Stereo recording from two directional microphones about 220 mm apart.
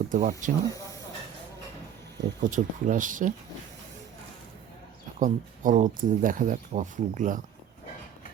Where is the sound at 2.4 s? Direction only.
35° right (ahead or behind).